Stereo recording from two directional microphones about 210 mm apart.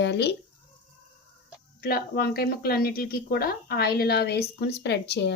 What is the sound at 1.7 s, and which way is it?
Speech, 45° left (ahead or behind).